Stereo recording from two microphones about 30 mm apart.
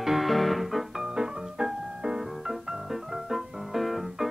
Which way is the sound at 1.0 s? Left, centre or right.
Right.